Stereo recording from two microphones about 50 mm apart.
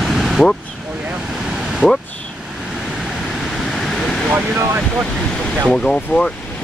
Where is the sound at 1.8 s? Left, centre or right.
Centre.